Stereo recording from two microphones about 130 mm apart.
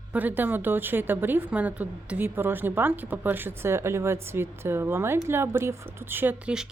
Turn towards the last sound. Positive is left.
turn(degrees=-5)  # may be behind; listen again after turning